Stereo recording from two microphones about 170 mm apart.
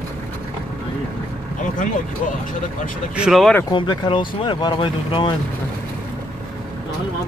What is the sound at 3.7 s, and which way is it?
Speech, 25° left (ahead or behind).